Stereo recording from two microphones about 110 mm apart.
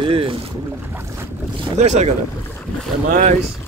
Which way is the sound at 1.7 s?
90° right.